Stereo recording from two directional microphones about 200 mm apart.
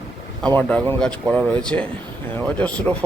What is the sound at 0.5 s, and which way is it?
Speech, 5° left (ahead or behind).